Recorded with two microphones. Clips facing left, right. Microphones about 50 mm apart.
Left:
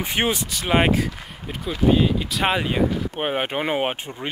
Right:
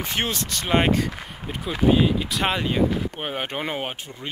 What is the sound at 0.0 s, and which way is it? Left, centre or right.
Speech, centre.